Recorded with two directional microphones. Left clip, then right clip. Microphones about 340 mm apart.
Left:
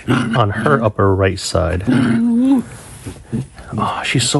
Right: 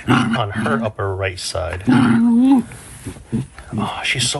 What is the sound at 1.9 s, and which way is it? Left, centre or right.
Speech, centre.